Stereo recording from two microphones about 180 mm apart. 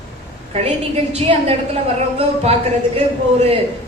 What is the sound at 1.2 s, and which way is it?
Speech, 35° right (ahead or behind).